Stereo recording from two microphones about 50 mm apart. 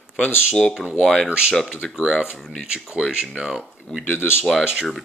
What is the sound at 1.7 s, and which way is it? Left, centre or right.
Speech, centre.